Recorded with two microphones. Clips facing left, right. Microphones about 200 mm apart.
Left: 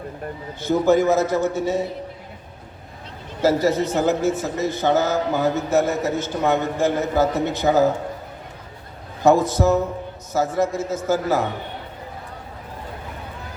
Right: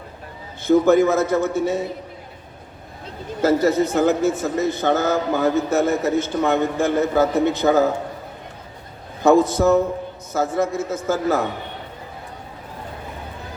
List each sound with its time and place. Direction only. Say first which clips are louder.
0.7 s a man's voice: right 2 dB; 55° right (ahead or behind)
3.4 s a man's voice: right 1 dB; 55° right (ahead or behind)
9.2 s a man's voice: right 2 dB; 50° right (ahead or behind)